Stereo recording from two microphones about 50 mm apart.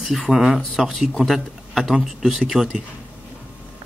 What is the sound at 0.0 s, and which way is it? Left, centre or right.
Speech, centre.